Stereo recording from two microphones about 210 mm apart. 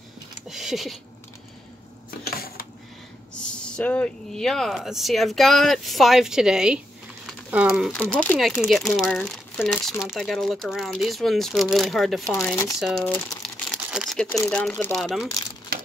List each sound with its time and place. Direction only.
0.5 s speech: centre (ahead or behind)
2.0 s a sound: 45° left (ahead or behind)
3.4 s speech: 5° left (ahead or behind)